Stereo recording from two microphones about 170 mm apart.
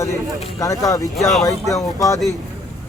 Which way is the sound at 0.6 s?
20° left (ahead or behind).